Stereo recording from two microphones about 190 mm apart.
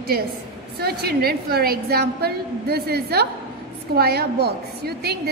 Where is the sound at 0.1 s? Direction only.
55° right (ahead or behind).